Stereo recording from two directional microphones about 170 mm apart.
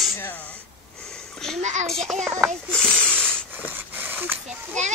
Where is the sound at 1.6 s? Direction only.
45° right (ahead or behind).